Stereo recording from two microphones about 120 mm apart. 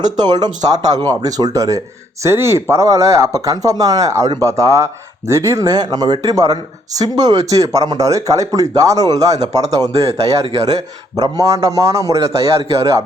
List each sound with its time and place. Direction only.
0.2 s speech: 35° right (ahead or behind)
11.2 s speech: 30° right (ahead or behind)